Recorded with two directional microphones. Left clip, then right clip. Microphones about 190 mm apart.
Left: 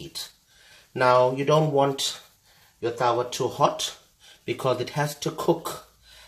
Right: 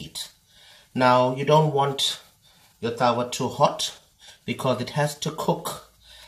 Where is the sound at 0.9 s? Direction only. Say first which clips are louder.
Even; 30° left (ahead or behind).